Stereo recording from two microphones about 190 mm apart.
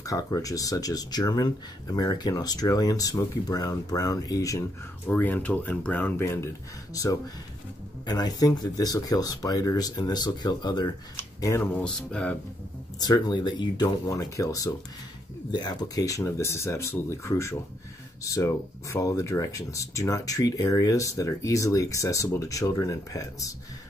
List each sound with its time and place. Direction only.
0.0 s speech: 15° left (ahead or behind)
13.0 s speech: 20° left (ahead or behind)